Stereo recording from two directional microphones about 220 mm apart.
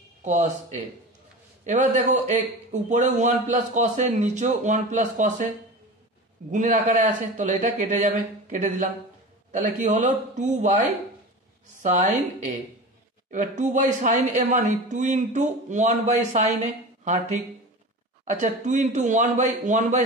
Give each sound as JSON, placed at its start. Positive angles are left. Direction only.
{"t": 0.2, "sound": "speech", "side_deg": -35}
{"t": 6.5, "sound": "speech", "side_deg": -35}
{"t": 11.8, "sound": "speech", "side_deg": -35}